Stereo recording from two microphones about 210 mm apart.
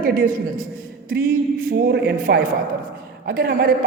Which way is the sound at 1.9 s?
50° right (ahead or behind).